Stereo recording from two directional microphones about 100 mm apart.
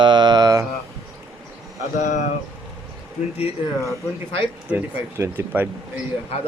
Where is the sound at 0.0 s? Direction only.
45° right (ahead or behind).